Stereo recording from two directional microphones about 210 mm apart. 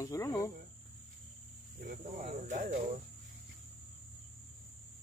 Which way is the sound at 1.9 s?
35° right (ahead or behind).